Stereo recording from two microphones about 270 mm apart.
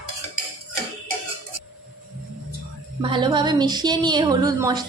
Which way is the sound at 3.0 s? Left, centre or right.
Centre.